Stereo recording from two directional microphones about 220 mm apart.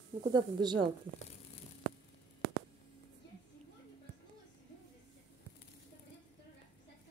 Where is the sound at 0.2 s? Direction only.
20° right (ahead or behind).